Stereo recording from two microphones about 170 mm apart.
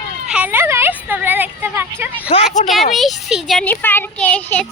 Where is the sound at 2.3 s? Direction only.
45° left (ahead or behind).